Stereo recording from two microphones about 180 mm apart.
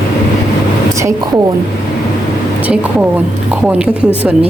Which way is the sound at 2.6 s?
5° right (ahead or behind).